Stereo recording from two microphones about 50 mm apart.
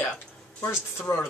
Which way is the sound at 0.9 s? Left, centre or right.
Left.